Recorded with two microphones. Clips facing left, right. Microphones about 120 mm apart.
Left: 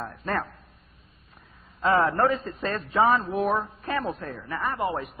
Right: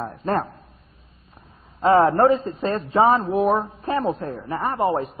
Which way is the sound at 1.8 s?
30° right (ahead or behind).